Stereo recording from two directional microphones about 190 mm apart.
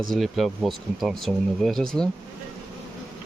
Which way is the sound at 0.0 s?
Centre (ahead or behind).